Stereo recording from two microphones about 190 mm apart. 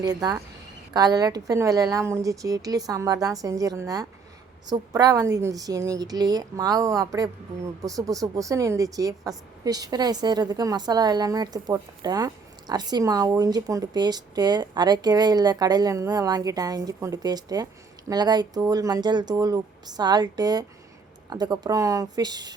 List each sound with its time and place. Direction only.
0.0 s a woman's voice: 20° right (ahead or behind)